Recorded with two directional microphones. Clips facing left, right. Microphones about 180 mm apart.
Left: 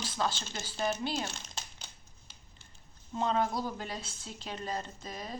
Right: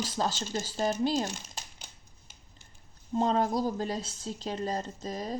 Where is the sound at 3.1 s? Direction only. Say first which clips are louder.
Right 4 dB; 35° right (ahead or behind).